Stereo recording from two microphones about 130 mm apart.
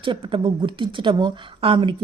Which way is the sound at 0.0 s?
40° right (ahead or behind).